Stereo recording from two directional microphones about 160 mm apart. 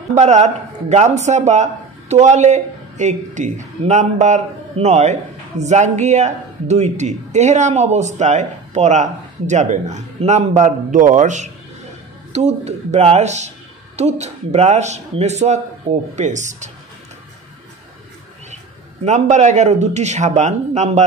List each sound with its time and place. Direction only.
0.1 s a man's voice: 45° right (ahead or behind)
19.0 s a man's voice: 45° right (ahead or behind)